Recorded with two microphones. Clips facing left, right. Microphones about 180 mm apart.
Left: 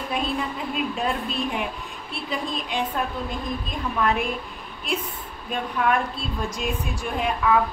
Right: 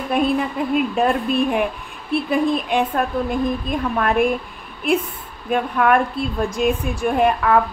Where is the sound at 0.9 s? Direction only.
55° right (ahead or behind).